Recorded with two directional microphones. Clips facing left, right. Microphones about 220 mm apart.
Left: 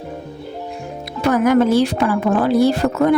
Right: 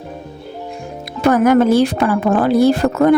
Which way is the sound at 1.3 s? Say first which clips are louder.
Right 2 dB; 50° right (ahead or behind).